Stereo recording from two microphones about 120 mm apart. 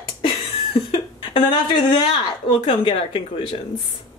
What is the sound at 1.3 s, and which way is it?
A woman's voice, 40° left (ahead or behind).